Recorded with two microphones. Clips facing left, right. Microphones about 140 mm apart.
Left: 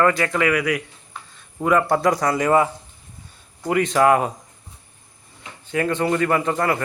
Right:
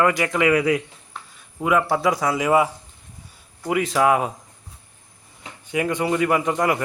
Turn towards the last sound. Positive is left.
turn(degrees=-15)  # may be behind; listen again after turning